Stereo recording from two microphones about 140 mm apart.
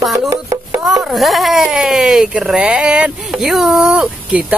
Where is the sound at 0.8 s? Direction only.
Centre (ahead or behind).